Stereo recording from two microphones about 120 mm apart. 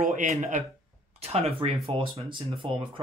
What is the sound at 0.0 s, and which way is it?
Speech, 90° right.